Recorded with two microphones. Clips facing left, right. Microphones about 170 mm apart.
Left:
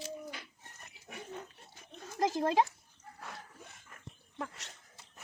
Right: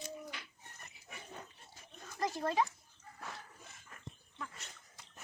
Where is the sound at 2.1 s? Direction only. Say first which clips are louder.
Left 5 dB; 90° left.